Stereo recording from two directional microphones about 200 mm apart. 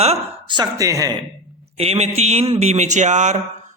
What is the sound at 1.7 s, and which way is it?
A man's voice, 30° right (ahead or behind).